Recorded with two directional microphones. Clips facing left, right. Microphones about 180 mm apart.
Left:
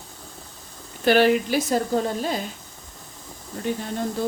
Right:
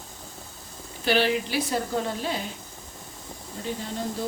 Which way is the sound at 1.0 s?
50° left (ahead or behind).